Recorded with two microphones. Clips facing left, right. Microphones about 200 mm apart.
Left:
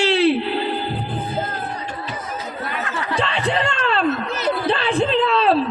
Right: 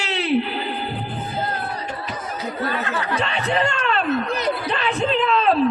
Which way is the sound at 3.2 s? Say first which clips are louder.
Left 2 dB; 30° left (ahead or behind).